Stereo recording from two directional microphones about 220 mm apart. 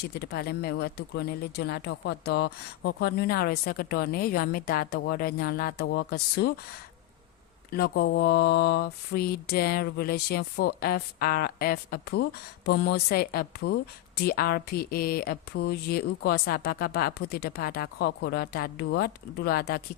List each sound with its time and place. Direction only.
0.0 s speech: 45° left (ahead or behind)
7.7 s speech: 45° left (ahead or behind)